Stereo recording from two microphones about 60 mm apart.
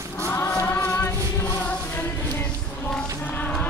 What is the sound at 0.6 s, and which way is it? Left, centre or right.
Music, left.